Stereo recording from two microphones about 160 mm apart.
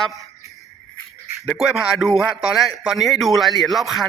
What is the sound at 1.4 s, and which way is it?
A man's voice, centre (ahead or behind).